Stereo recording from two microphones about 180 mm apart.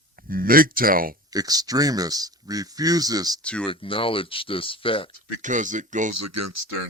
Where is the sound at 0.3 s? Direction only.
55° right (ahead or behind).